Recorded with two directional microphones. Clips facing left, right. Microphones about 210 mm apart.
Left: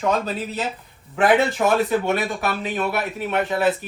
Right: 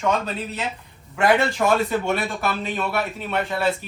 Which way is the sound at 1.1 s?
Centre (ahead or behind).